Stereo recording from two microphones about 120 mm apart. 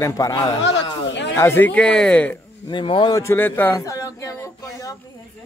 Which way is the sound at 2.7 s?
40° left (ahead or behind).